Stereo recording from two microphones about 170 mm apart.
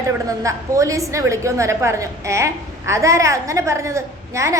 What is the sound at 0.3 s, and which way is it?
A woman's voice, 20° right (ahead or behind).